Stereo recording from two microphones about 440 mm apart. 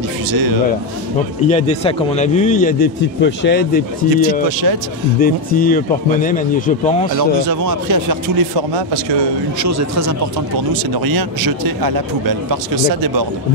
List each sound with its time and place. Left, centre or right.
0.3 s speech: right
1.5 s a man's voice: centre
4.5 s speech: right
5.2 s a man's voice: centre
7.2 s speech: right
9.6 s speech: right
10.7 s speech: right